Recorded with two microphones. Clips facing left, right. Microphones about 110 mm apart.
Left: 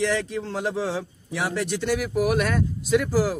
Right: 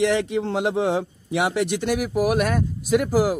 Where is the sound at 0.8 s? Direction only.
60° right (ahead or behind).